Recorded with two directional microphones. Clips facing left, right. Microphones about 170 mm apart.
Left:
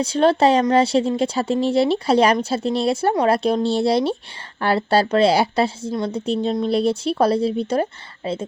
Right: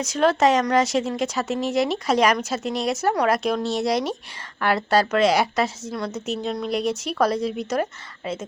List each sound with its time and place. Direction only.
0.0 s speech: 30° left (ahead or behind)